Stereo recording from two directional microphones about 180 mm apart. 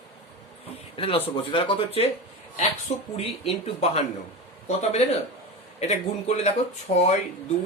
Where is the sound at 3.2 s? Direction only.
35° left (ahead or behind).